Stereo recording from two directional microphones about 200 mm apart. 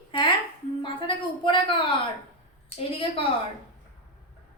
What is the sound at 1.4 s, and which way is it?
A woman's voice, 25° left (ahead or behind).